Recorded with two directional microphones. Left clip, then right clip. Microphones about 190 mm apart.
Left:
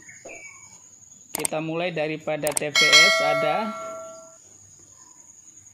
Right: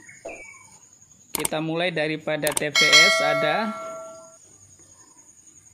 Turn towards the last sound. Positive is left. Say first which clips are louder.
# even
turn(degrees=0)  # may be behind; listen again after turning